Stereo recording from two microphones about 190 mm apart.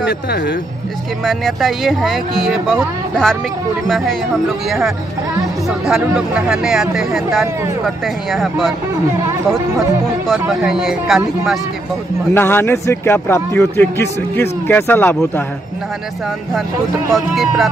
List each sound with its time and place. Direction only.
0.0 s speech: 65° left (ahead or behind)
1.2 s speech: centre (ahead or behind)
10.4 s speech: 5° right (ahead or behind)
12.4 s a man's voice: 10° left (ahead or behind)
17.1 s speech: centre (ahead or behind)